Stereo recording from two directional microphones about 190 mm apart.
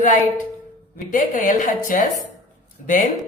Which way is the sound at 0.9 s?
45° left (ahead or behind).